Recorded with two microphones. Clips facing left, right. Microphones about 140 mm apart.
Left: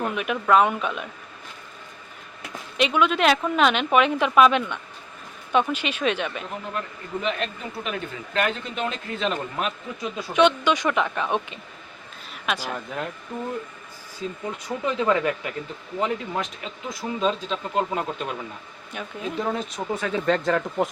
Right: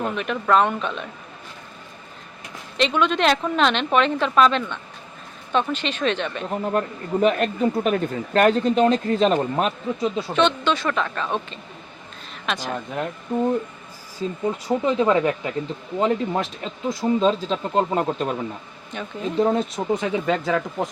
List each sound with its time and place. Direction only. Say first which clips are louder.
0.2 s a woman's voice: even; 5° left (ahead or behind)
2.7 s a woman's voice: right 1 dB; 10° left (ahead or behind)
6.5 s speech: right 8 dB; 40° right (ahead or behind)
10.3 s a woman's voice: left 3 dB; 10° left (ahead or behind)
12.3 s a sound: right 1 dB; 10° left (ahead or behind)
12.7 s speech: right 3 dB; 20° right (ahead or behind)
14.4 s speech: right 7 dB; 25° right (ahead or behind)
18.9 s speech: right 3 dB; 5° left (ahead or behind)
19.4 s speech: right 8 dB; 30° right (ahead or behind)
19.9 s speech: right 3 dB; 15° right (ahead or behind)
20.2 s speech: even; 5° right (ahead or behind)